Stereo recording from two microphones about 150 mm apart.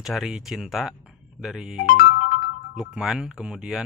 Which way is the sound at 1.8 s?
70° left (ahead or behind).